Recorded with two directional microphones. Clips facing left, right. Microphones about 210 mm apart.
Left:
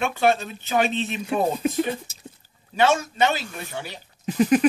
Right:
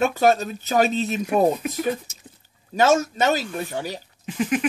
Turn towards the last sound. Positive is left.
turn(degrees=40)  # may be behind; listen again after turning